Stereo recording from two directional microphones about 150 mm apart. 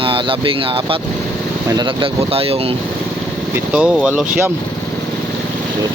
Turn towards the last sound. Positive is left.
turn(degrees=-10)  # may be behind; listen again after turning